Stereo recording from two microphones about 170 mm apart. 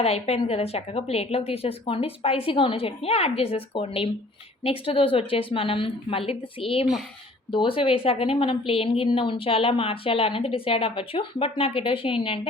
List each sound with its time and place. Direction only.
0.0 s a woman's voice: 35° left (ahead or behind)